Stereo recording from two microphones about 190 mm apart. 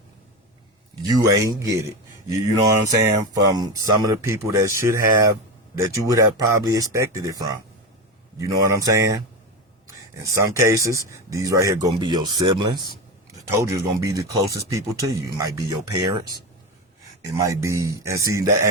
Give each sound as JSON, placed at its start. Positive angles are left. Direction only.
{"t": 1.1, "sound": "speech", "side_deg": -15}
{"t": 10.3, "sound": "speech", "side_deg": -15}
{"t": 17.2, "sound": "speech", "side_deg": -15}